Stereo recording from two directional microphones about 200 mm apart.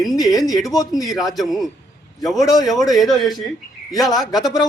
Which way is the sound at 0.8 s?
15° left (ahead or behind).